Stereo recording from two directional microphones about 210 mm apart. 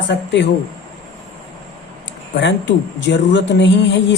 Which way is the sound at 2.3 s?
55° left (ahead or behind).